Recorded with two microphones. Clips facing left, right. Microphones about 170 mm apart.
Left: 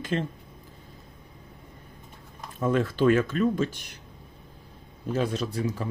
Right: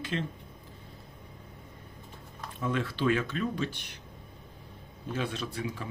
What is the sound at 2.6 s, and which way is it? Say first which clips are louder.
A man's voice: left 7 dB; 45° left (ahead or behind).